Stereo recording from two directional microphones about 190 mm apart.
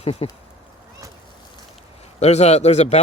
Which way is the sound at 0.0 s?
30° left (ahead or behind).